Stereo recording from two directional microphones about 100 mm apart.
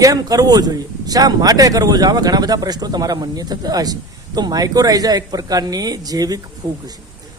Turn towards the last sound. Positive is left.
turn(degrees=-40)  # may be behind; listen again after turning